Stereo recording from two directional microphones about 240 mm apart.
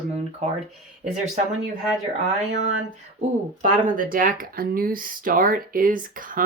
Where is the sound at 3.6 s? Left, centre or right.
Right.